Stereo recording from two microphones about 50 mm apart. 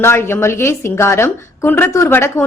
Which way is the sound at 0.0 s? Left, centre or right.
Left.